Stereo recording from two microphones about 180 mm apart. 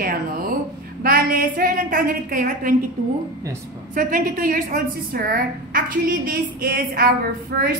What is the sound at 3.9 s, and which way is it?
A woman's voice, 50° right (ahead or behind).